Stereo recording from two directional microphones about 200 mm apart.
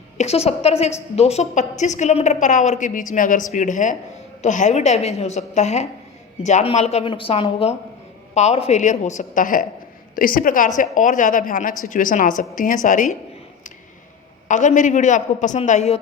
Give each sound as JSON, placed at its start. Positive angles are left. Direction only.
{"t": 0.2, "sound": "a woman's voice", "side_deg": 30}
{"t": 14.4, "sound": "a woman's voice", "side_deg": 40}